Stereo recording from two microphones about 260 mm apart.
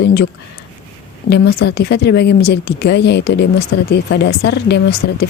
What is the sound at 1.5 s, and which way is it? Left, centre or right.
Speech, left.